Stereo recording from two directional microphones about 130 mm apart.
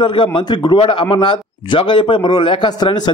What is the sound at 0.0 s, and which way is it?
A man's voice, 40° left (ahead or behind).